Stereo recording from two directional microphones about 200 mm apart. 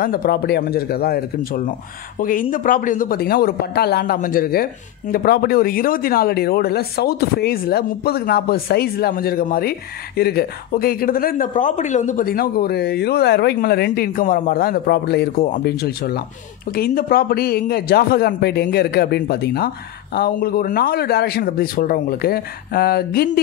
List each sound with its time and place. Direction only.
0.0 s speech: 50° left (ahead or behind)